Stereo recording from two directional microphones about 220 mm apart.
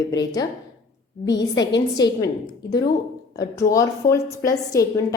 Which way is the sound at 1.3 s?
55° left (ahead or behind).